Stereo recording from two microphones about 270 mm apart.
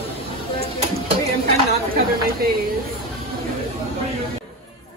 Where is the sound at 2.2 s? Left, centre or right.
Right.